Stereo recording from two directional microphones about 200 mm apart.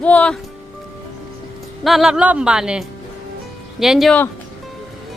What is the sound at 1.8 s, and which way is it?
Speech, centre (ahead or behind).